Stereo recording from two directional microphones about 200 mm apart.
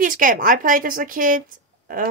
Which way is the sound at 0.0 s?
45° right (ahead or behind).